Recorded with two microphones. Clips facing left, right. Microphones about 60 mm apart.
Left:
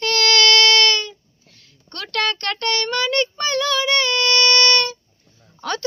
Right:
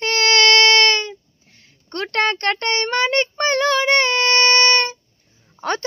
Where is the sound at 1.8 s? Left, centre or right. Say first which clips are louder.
Right 3 dB; right.